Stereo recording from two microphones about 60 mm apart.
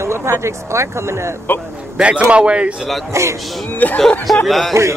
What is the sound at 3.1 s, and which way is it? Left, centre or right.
Speech, right.